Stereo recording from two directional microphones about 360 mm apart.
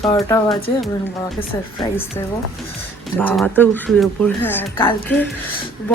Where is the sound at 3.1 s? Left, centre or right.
Centre.